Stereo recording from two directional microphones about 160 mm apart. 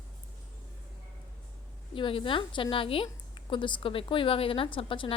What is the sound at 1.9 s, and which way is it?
A woman's voice, 30° left (ahead or behind).